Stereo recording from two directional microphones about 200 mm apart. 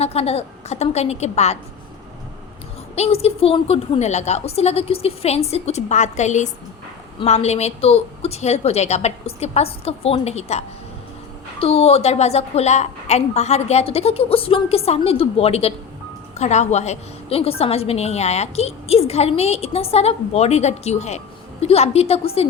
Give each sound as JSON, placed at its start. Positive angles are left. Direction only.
{"t": 0.0, "sound": "a woman's voice", "side_deg": 30}
{"t": 2.9, "sound": "a woman's voice", "side_deg": 30}
{"t": 11.6, "sound": "a woman's voice", "side_deg": 30}